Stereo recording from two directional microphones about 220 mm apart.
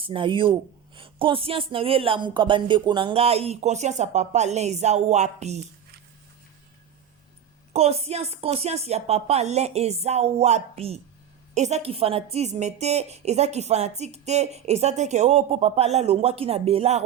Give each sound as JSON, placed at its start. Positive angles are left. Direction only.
{"t": 0.0, "sound": "a woman's voice", "side_deg": -25}
{"t": 7.7, "sound": "a woman's voice", "side_deg": -30}